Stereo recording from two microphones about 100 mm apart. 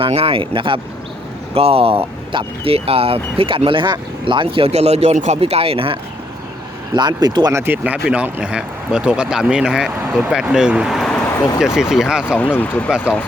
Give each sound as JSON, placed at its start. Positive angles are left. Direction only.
{"t": 0.0, "sound": "speech", "side_deg": -75}
{"t": 1.5, "sound": "speech", "side_deg": -80}
{"t": 6.9, "sound": "speech", "side_deg": -45}
{"t": 7.5, "sound": "speech", "side_deg": -20}
{"t": 12.4, "sound": "speech", "side_deg": 15}